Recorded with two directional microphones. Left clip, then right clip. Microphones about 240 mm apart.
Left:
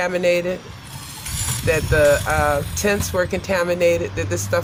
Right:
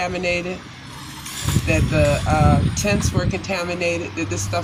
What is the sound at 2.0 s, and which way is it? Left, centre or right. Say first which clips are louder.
Speech: left 3 dB; left.